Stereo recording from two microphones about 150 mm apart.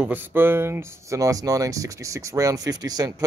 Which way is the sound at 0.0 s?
15° right (ahead or behind).